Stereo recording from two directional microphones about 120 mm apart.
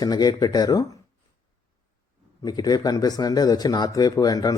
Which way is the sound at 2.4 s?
35° left (ahead or behind).